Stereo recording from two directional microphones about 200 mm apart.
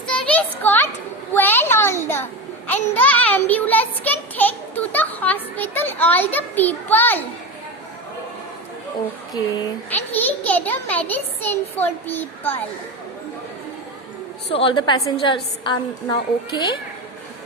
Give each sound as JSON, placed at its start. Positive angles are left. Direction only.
{"t": 0.1, "sound": "a sound", "side_deg": 5}
{"t": 9.9, "sound": "a child's voice", "side_deg": 10}
{"t": 14.5, "sound": "a woman's voice", "side_deg": 25}